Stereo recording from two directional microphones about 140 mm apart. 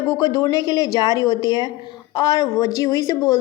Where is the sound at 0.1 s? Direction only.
25° left (ahead or behind).